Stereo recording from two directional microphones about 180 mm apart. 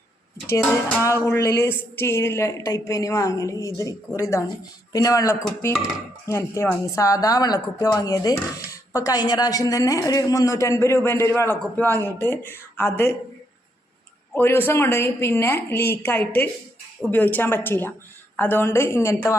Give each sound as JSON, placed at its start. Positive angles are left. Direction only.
{"t": 0.6, "sound": "speech", "side_deg": 10}
{"t": 14.3, "sound": "speech", "side_deg": 10}